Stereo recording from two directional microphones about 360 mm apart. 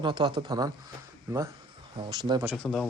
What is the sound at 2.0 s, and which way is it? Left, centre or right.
Speech, centre.